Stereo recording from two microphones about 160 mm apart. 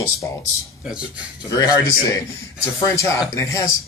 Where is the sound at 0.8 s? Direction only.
5° right (ahead or behind).